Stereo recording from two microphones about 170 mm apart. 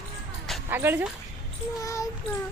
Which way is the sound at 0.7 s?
10° right (ahead or behind).